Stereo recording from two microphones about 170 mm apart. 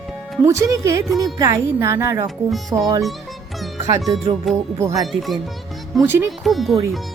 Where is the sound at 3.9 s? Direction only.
20° right (ahead or behind).